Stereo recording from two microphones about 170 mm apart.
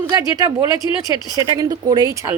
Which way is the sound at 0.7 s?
25° left (ahead or behind).